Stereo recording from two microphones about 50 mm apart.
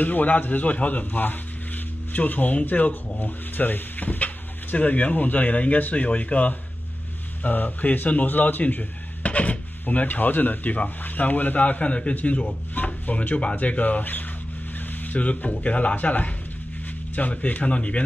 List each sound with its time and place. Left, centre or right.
0.0 s speech: left